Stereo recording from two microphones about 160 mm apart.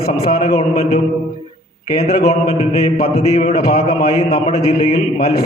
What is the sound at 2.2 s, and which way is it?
Speech, 40° left (ahead or behind).